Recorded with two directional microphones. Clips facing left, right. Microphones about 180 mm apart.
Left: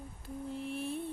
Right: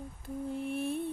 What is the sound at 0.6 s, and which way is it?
Mantra, 55° right (ahead or behind).